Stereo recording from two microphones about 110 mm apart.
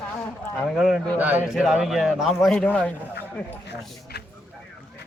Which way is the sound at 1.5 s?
5° right (ahead or behind).